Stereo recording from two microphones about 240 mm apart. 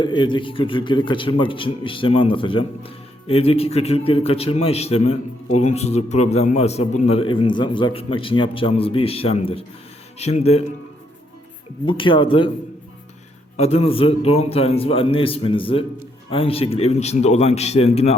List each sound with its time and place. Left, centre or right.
0.0 s a man's voice: centre
11.9 s a man's voice: left
13.6 s a man's voice: left